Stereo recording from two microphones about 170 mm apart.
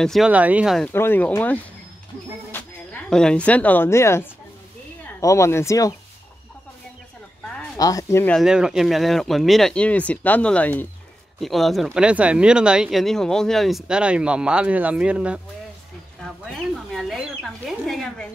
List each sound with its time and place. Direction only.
0.0 s speech: centre (ahead or behind)
0.8 s a woman's voice: 10° left (ahead or behind)
7.7 s speech: 20° left (ahead or behind)
8.4 s speech: 5° right (ahead or behind)
16.9 s a sound: centre (ahead or behind)